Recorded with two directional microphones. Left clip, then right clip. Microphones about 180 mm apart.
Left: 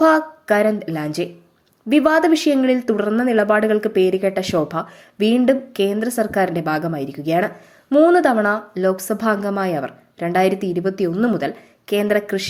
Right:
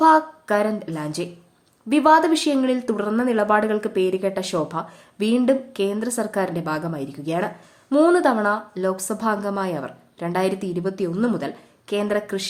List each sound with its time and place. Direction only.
0.0 s a woman's voice: 15° left (ahead or behind)